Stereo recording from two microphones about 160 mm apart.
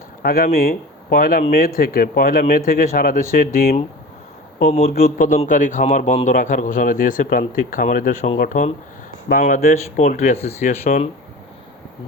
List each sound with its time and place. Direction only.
0.2 s speech: 65° left (ahead or behind)
4.7 s speech: 50° left (ahead or behind)